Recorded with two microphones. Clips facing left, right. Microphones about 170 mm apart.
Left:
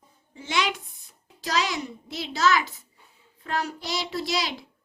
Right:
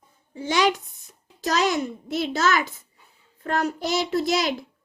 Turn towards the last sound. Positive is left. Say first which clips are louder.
# right 6 dB
turn(degrees=-50)  # may be behind; listen again after turning